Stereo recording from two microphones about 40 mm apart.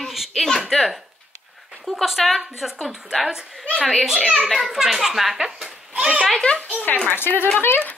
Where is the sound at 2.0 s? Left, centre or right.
Centre.